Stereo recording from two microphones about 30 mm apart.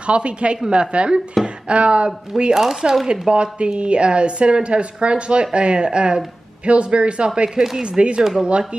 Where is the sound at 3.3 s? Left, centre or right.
Right.